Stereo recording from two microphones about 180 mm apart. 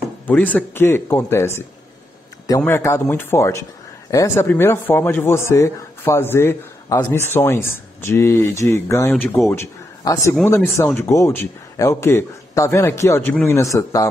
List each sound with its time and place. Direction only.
0.3 s a man's voice: 10° left (ahead or behind)